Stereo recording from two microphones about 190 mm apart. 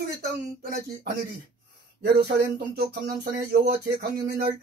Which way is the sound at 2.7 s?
55° right (ahead or behind).